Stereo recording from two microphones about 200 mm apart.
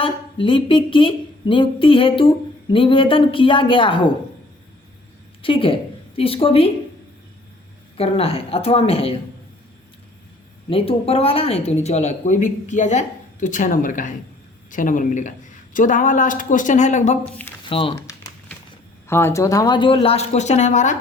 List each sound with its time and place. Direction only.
0.0 s a woman's voice: 25° left (ahead or behind)
5.4 s a woman's voice: 25° left (ahead or behind)
7.9 s a woman's voice: 30° left (ahead or behind)
10.7 s speech: 30° left (ahead or behind)
17.7 s crumpling: 25° left (ahead or behind)
19.0 s a woman's voice: 10° left (ahead or behind); by 21.0 s 35° left (ahead or behind)